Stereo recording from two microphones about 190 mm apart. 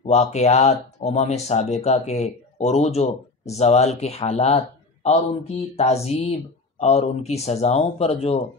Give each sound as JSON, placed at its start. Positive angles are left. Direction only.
{"t": 0.0, "sound": "speech", "side_deg": 35}